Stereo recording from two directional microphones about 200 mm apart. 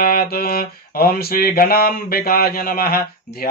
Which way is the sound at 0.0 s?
45° left (ahead or behind).